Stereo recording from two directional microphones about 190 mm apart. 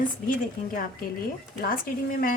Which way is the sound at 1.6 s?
50° left (ahead or behind).